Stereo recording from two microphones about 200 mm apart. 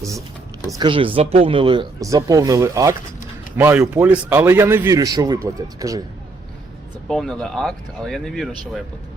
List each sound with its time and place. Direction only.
0.7 s a man's voice: 25° right (ahead or behind)
7.1 s speech: centre (ahead or behind)